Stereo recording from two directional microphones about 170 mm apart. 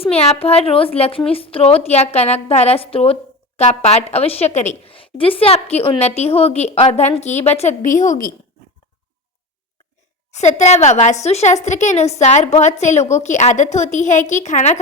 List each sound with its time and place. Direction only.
0.0 s a woman's voice: 35° left (ahead or behind)
10.3 s a woman's voice: 40° left (ahead or behind)